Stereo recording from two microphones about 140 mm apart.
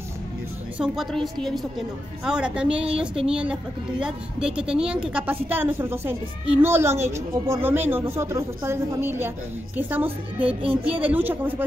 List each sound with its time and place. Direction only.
0.7 s a woman's voice: 5° right (ahead or behind)